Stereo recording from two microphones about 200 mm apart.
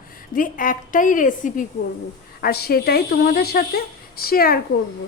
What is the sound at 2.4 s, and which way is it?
A woman's voice, 50° left (ahead or behind).